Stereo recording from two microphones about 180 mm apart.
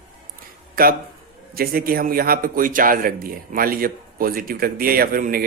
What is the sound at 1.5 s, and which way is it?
A man's voice, 55° right (ahead or behind).